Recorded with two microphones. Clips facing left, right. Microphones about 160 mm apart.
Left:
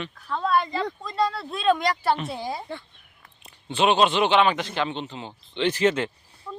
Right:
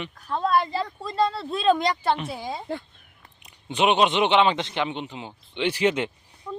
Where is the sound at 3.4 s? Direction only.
15° right (ahead or behind).